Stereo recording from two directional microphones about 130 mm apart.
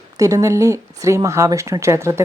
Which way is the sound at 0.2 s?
25° right (ahead or behind).